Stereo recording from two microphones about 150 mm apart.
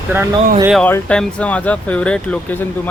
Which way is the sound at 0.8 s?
10° left (ahead or behind).